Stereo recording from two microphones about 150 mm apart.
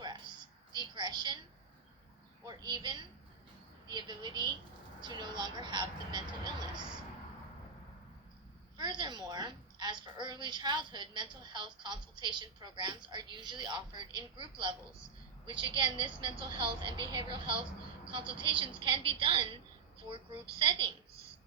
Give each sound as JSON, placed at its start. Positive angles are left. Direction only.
{"t": 0.8, "sound": "a sound", "side_deg": -30}
{"t": 2.5, "sound": "a woman's voice", "side_deg": -25}
{"t": 8.8, "sound": "a woman's voice", "side_deg": -30}